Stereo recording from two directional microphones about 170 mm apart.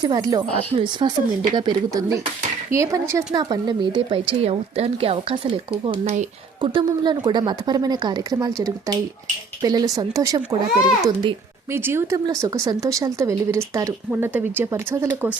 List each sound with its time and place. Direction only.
0.0 s speech: 20° right (ahead or behind)
0.5 s speech: 30° right (ahead or behind)
6.7 s speech: 25° right (ahead or behind)
11.7 s speech: 15° right (ahead or behind)